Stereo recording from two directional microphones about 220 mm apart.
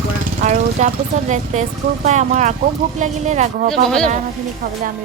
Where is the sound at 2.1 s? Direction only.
35° right (ahead or behind).